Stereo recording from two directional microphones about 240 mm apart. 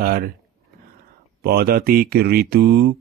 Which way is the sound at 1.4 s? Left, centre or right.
Right.